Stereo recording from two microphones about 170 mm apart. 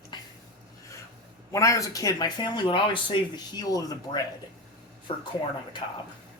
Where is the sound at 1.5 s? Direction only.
20° left (ahead or behind).